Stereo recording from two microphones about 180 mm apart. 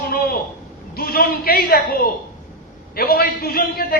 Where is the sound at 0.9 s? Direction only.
55° left (ahead or behind).